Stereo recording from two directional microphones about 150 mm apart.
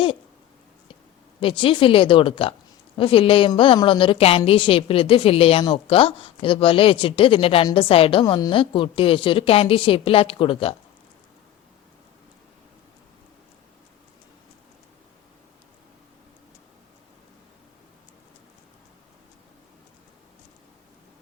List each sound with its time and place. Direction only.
1.4 s a woman's voice: 35° left (ahead or behind)